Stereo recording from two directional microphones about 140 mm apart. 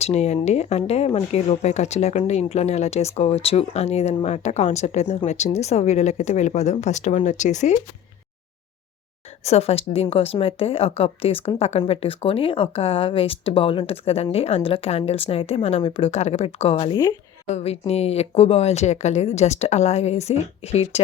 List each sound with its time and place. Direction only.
0.0 s a woman's voice: 50° left (ahead or behind)
9.4 s speech: 50° left (ahead or behind)
17.5 s speech: 50° left (ahead or behind)